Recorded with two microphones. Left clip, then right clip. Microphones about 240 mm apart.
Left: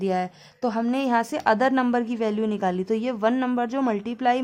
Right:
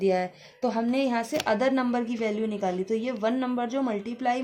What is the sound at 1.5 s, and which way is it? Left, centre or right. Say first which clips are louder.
Speech: left 5 dB; centre.